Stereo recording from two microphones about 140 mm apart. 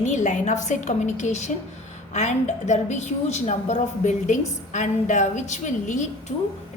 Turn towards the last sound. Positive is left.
turn(degrees=60)  # may be behind; listen again after turning